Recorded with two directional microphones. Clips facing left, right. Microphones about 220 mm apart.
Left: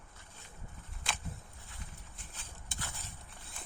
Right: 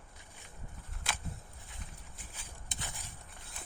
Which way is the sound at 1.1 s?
5° right (ahead or behind).